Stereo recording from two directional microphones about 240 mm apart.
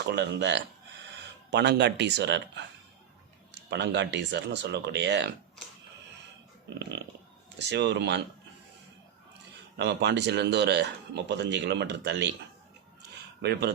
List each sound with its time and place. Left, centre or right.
0.0 s speech: right
7.6 s speech: right
9.7 s speech: right
13.0 s a sound: right